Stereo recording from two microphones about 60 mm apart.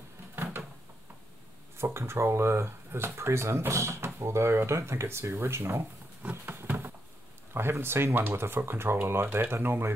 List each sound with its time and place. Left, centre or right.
0.4 s a sound: right
1.8 s speech: right
6.3 s patter: right
7.5 s speech: right